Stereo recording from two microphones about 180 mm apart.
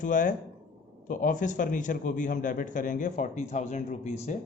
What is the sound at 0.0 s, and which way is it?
A man's voice, 45° left (ahead or behind).